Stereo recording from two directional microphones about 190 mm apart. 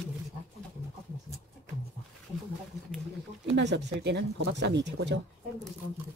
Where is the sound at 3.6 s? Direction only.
65° right (ahead or behind).